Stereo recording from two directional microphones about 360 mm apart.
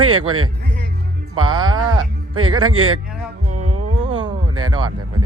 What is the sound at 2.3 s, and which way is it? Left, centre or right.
Speech, right.